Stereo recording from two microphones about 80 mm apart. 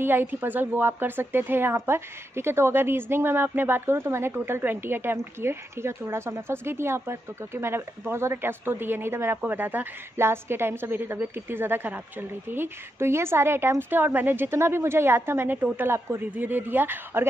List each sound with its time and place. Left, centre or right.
0.0 s a woman's voice: right